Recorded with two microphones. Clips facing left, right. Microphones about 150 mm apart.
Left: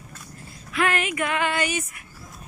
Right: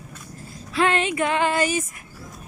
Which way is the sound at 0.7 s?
30° right (ahead or behind).